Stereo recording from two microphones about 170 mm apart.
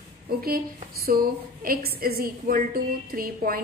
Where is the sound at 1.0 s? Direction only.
60° right (ahead or behind).